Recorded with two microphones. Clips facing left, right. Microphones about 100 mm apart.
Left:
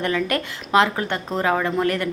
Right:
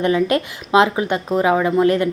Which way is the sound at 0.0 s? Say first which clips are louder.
Right 6 dB; 20° right (ahead or behind).